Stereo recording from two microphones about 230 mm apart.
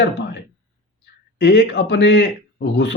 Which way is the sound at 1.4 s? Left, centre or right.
Left.